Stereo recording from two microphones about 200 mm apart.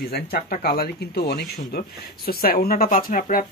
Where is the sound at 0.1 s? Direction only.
50° left (ahead or behind).